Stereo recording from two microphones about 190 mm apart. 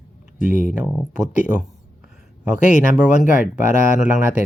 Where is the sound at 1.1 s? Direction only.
5° right (ahead or behind).